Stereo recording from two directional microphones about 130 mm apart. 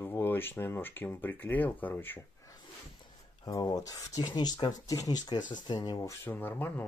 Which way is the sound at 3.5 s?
30° left (ahead or behind).